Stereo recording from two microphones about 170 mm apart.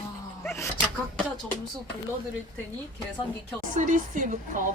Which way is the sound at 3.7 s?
50° right (ahead or behind).